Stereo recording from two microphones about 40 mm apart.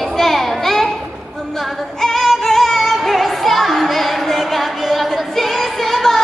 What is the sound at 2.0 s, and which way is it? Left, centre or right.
Music, centre.